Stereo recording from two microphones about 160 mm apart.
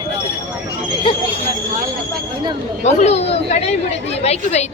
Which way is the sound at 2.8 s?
45° left (ahead or behind).